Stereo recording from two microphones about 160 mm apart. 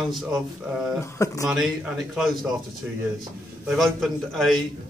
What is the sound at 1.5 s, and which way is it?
A man's voice, 5° right (ahead or behind).